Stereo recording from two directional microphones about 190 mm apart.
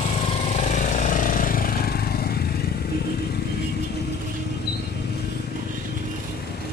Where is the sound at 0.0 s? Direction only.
35° left (ahead or behind); by 2.6 s 55° left (ahead or behind).